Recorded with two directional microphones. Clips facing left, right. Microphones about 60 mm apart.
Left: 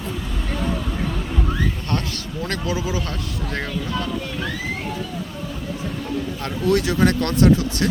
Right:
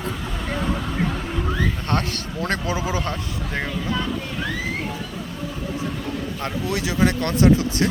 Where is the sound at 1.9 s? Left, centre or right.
Right.